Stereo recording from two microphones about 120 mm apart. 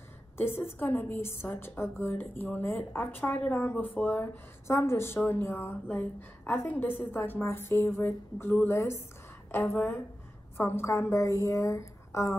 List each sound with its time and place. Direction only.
0.4 s a woman's voice: 20° left (ahead or behind)